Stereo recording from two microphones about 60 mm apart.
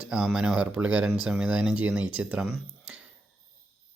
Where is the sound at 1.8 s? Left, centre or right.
Right.